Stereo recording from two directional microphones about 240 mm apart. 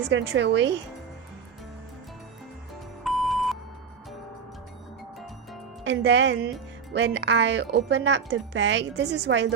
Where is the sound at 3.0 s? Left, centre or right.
Centre.